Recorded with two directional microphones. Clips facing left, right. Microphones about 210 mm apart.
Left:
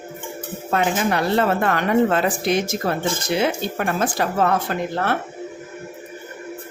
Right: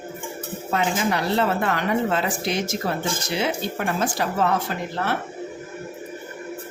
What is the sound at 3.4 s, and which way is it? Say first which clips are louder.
Speech: left 1 dB; 55° left (ahead or behind).